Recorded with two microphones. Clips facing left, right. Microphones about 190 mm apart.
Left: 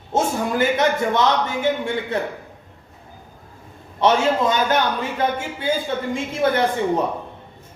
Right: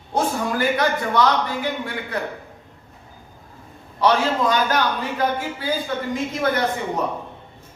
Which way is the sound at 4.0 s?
25° left (ahead or behind).